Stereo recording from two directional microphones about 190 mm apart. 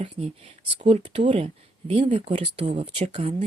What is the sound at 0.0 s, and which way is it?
Speech, 35° right (ahead or behind).